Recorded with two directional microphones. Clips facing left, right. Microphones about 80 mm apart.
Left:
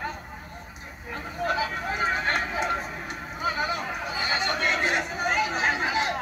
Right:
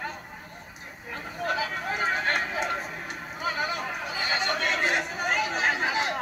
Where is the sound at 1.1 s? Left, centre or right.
Centre.